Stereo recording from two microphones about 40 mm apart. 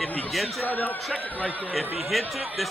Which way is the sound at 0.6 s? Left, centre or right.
Left.